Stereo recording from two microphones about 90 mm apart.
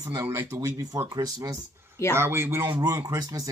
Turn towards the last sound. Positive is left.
turn(degrees=-40)  # may be behind; listen again after turning